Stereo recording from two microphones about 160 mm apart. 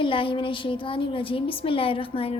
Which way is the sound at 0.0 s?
30° left (ahead or behind).